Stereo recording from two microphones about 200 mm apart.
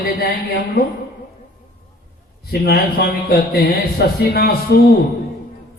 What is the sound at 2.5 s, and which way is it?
A man's voice, 50° left (ahead or behind).